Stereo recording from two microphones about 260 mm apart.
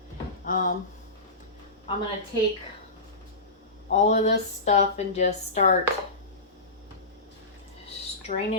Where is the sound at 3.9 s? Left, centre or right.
Left.